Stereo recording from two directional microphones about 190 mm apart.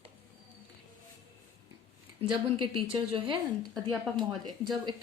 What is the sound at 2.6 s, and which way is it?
Speech, 25° right (ahead or behind).